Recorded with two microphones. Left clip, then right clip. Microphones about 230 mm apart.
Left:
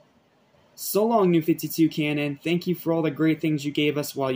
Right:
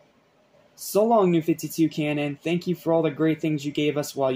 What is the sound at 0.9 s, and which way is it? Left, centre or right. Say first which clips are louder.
Speech: right 1 dB; centre.